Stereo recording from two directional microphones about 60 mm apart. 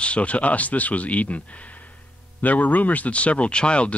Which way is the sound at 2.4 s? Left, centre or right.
Left.